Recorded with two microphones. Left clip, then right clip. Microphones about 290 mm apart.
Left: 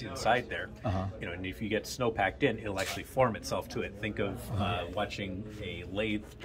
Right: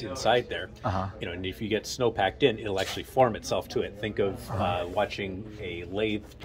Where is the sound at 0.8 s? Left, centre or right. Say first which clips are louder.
Right 8 dB; centre.